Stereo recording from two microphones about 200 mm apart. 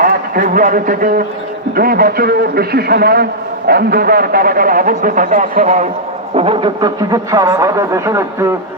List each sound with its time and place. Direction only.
0.0 s a man's voice: 45° right (ahead or behind); by 8.5 s 15° right (ahead or behind)